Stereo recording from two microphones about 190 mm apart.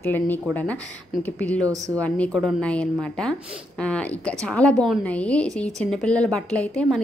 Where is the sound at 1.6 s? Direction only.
15° right (ahead or behind).